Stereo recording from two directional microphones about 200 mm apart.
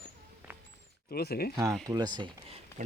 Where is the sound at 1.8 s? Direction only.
20° right (ahead or behind).